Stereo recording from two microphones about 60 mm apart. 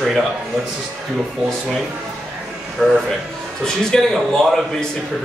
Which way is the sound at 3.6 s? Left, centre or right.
Centre.